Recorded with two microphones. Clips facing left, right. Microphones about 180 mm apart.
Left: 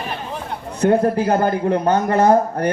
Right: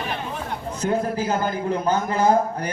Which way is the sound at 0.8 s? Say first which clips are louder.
Left 8 dB; 60° left (ahead or behind).